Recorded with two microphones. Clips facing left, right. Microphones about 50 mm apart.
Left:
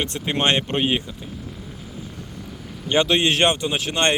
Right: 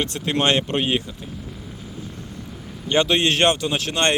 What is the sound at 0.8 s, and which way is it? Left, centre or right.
Speech, centre.